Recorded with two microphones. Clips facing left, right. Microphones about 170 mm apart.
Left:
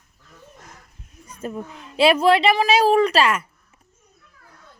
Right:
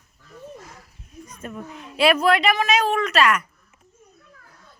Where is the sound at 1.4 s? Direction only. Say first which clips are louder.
Left 4 dB; 30° left (ahead or behind).